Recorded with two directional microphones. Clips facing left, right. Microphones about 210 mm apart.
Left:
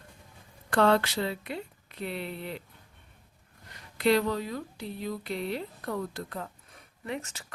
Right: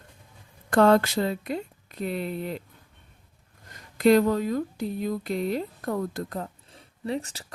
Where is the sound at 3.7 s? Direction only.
45° right (ahead or behind).